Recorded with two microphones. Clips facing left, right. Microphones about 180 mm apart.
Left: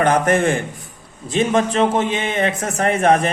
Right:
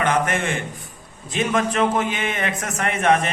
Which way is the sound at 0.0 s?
40° left (ahead or behind).